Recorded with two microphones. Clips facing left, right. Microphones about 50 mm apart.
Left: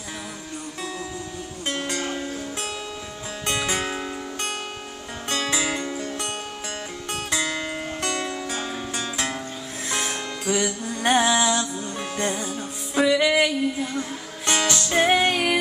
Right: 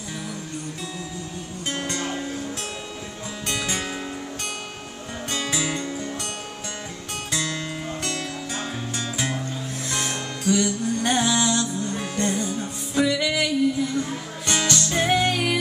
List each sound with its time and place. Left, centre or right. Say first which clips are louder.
1.7 s music: left 1 dB; centre
3.6 s music: left 2 dB; centre
5.3 s music: left 2 dB; centre
5.9 s music: even; centre
7.2 s music: left 1 dB; centre
9.1 s music: right 1 dB; centre; by 15.6 s left